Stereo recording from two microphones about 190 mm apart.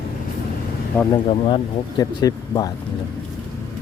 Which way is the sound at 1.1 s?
25° left (ahead or behind).